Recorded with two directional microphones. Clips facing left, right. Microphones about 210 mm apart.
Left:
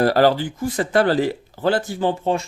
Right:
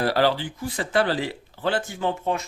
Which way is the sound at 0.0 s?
45° left (ahead or behind).